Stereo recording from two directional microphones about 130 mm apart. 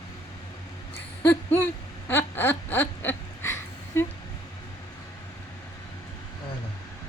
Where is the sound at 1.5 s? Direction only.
15° left (ahead or behind).